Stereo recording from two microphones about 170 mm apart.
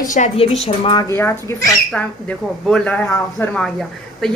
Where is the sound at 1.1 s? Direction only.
15° left (ahead or behind).